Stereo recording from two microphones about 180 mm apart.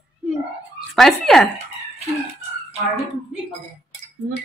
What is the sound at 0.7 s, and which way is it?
Speech, centre (ahead or behind).